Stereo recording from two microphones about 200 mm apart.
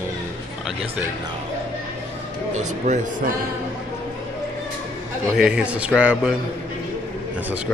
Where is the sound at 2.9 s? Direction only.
35° right (ahead or behind).